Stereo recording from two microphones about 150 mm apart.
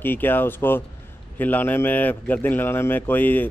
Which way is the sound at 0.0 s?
15° left (ahead or behind).